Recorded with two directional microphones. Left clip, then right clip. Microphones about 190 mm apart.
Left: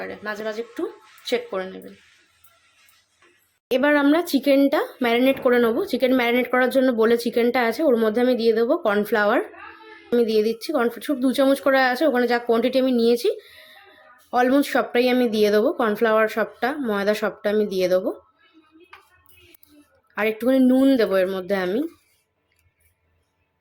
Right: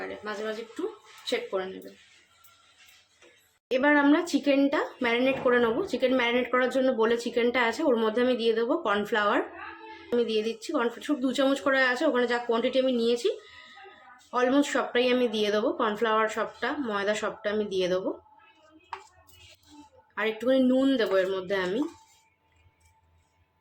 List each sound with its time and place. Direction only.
0.0 s speech: 40° left (ahead or behind)
3.7 s speech: 35° left (ahead or behind)
20.1 s speech: 30° left (ahead or behind)